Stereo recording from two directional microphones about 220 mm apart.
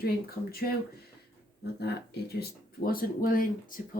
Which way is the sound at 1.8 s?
45° left (ahead or behind).